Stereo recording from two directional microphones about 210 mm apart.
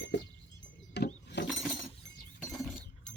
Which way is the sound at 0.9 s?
55° left (ahead or behind).